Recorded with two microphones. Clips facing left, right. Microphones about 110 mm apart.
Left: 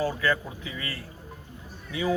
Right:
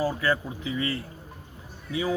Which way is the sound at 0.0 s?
25° right (ahead or behind).